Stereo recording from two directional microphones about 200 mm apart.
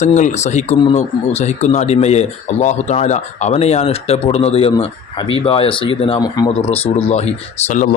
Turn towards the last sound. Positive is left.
turn(degrees=40)  # may be behind; listen again after turning